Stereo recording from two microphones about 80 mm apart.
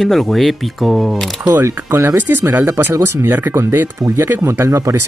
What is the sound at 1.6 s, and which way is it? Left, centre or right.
Speech, right.